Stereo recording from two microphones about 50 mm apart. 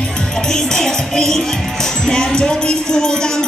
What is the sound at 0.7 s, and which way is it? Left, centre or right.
Music, centre.